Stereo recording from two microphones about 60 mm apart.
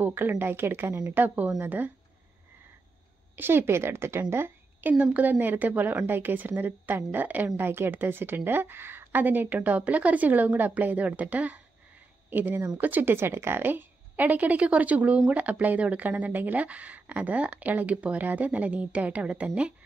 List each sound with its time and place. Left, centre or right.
0.0 s speech: right
1.1 s a woman's voice: right
3.3 s speech: right
4.9 s a woman's voice: right